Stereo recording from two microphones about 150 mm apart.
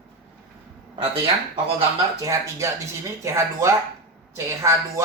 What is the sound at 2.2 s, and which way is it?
Speech, 20° right (ahead or behind).